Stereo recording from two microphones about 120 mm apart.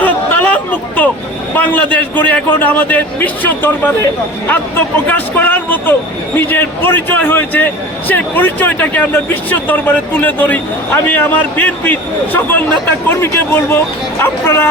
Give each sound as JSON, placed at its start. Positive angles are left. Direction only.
{"t": 0.0, "sound": "a sound", "side_deg": 15}
{"t": 1.5, "sound": "a man's voice", "side_deg": 15}
{"t": 5.0, "sound": "a man's voice", "side_deg": 15}